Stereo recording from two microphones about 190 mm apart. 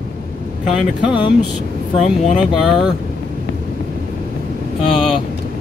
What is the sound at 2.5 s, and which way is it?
Speech, centre (ahead or behind).